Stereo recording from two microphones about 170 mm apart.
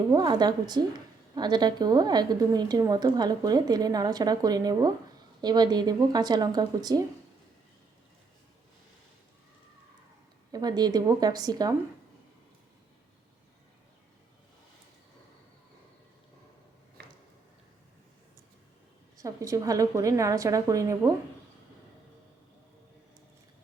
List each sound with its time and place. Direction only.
0.1 s a woman's voice: 25° right (ahead or behind)
10.5 s a woman's voice: 25° right (ahead or behind)
19.1 s a woman's voice: 20° right (ahead or behind)